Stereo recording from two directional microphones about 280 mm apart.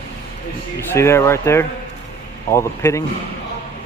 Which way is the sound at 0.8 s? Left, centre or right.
Centre.